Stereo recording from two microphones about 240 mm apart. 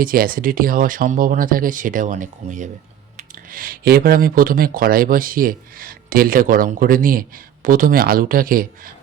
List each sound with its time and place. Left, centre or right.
0.0 s speech: right